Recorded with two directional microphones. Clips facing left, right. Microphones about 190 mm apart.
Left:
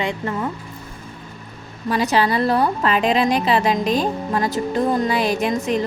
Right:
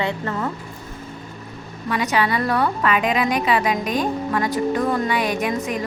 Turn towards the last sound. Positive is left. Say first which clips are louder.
# left 3 dB
turn(degrees=25)  # may be behind; listen again after turning